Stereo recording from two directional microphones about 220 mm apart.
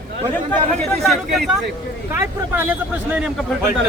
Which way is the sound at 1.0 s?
Centre (ahead or behind).